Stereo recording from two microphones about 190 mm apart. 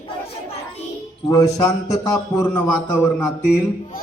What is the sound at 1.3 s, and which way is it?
A man's voice, 20° left (ahead or behind).